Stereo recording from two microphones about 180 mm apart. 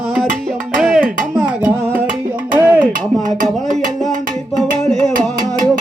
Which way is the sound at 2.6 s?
10° right (ahead or behind).